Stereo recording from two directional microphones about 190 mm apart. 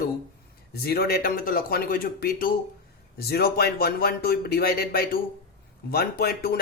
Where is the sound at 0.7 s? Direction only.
55° left (ahead or behind).